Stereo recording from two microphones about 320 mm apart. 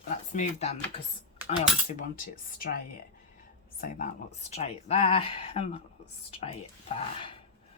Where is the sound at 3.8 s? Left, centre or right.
Left.